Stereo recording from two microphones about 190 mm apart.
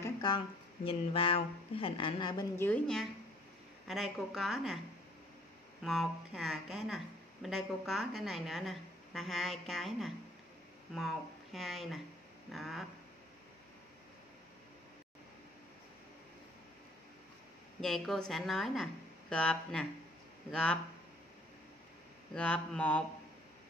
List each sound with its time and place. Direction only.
0.0 s a sound: 25° left (ahead or behind)
0.8 s a woman's voice: 30° left (ahead or behind)
2.5 s a woman's voice: 10° left (ahead or behind)
5.9 s a woman's voice: centre (ahead or behind)
17.7 s a woman's voice: centre (ahead or behind)
22.3 s a woman's voice: 5° left (ahead or behind)